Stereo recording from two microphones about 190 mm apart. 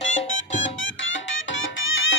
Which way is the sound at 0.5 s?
90° left.